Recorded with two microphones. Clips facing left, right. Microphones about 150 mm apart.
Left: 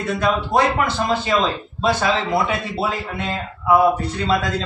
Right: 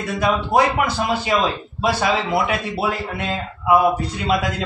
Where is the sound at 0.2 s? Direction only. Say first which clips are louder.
Right 2 dB; 10° right (ahead or behind).